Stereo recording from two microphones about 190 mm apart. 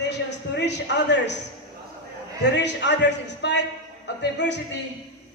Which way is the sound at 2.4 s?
65° left (ahead or behind).